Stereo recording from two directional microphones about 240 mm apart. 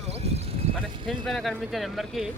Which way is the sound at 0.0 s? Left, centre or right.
Right.